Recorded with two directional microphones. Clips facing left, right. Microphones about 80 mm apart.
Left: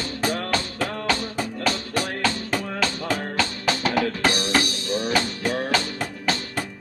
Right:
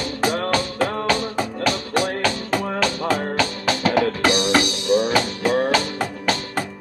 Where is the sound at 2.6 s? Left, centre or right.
Right.